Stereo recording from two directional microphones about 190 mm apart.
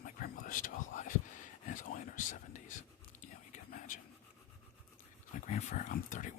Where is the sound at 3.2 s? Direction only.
40° left (ahead or behind).